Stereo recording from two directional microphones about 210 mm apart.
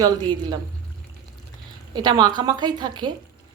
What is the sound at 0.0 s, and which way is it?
Speech, 20° right (ahead or behind).